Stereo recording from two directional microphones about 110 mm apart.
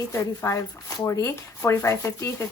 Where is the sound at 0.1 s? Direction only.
25° left (ahead or behind).